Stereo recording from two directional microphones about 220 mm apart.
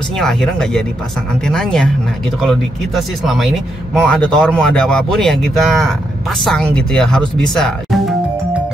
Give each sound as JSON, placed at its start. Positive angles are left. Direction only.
{"t": 0.2, "sound": "a man's voice", "side_deg": 0}